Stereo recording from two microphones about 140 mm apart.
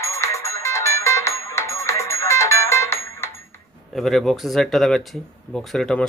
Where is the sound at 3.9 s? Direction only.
Centre (ahead or behind).